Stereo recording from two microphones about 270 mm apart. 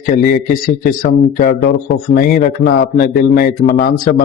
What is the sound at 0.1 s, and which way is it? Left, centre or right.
Speech, left.